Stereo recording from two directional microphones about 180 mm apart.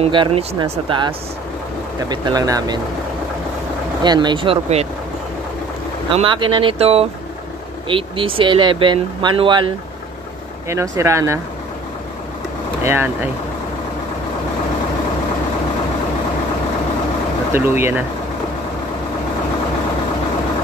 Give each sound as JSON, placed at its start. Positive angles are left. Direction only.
{"t": 0.0, "sound": "speech", "side_deg": -30}
{"t": 4.0, "sound": "speech", "side_deg": -25}
{"t": 6.1, "sound": "speech", "side_deg": -25}
{"t": 10.7, "sound": "speech", "side_deg": -15}
{"t": 12.8, "sound": "speech", "side_deg": -10}
{"t": 17.5, "sound": "speech", "side_deg": -15}